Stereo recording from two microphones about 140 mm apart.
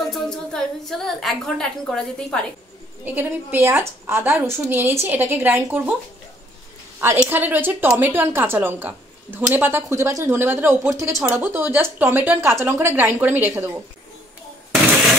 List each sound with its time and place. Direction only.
0.1 s a woman's voice: centre (ahead or behind)
3.2 s a woman's voice: 15° right (ahead or behind)
7.0 s a woman's voice: 15° right (ahead or behind)